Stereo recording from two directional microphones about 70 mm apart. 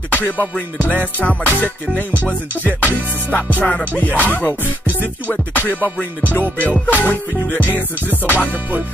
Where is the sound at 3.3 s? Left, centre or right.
Left.